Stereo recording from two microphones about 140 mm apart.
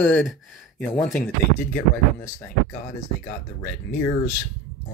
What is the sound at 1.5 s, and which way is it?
Speech, 80° left.